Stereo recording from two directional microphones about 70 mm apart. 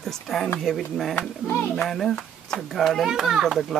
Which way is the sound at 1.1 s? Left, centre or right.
Left.